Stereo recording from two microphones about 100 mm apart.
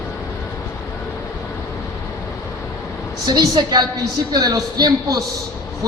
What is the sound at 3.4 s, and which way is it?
A woman's voice, 45° right (ahead or behind).